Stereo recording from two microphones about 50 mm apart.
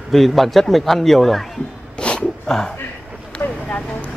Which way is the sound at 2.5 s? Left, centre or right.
Centre.